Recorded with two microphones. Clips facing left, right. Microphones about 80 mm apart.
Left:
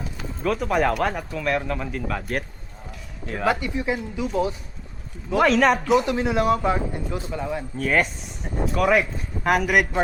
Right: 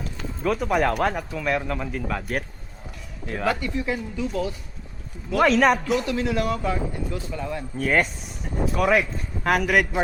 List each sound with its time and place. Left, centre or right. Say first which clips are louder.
0.0 s speech: even; centre
3.4 s speech: left 2 dB; centre
5.4 s speech: even; centre
6.0 s speech: left 3 dB; left
7.8 s speech: even; centre